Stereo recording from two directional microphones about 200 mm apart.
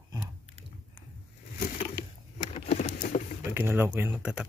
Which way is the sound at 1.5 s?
35° left (ahead or behind).